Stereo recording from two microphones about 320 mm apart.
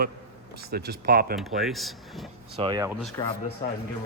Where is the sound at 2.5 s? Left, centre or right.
Centre.